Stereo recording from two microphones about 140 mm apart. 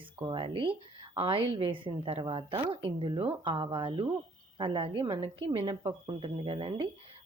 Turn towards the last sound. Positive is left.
turn(degrees=-35)  # may be behind; listen again after turning